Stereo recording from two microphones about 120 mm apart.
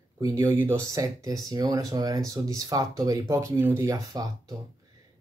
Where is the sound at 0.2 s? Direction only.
25° right (ahead or behind).